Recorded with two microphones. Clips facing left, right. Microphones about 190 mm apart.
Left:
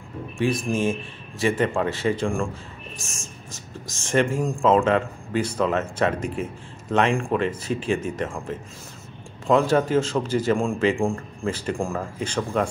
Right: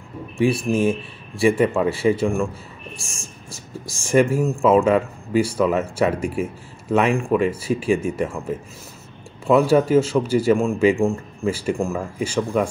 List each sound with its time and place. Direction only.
0.4 s speech: 10° right (ahead or behind)